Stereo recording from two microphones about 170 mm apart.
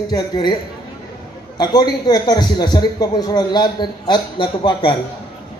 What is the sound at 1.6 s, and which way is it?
A man's voice, 25° left (ahead or behind).